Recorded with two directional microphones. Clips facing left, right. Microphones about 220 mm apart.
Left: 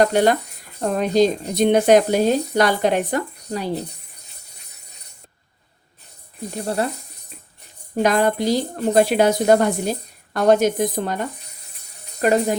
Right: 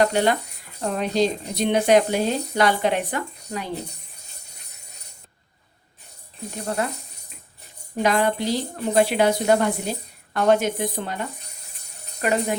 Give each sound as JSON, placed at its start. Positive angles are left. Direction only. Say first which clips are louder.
{"t": 0.0, "sound": "speech", "louder": "left 4 dB", "side_deg": 45}
{"t": 7.9, "sound": "a woman's voice", "louder": "left 3 dB", "side_deg": 45}